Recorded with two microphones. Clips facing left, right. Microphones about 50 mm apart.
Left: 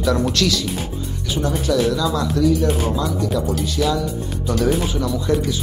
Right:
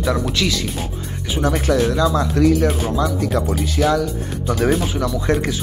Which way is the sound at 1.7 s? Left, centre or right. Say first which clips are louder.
Even; right.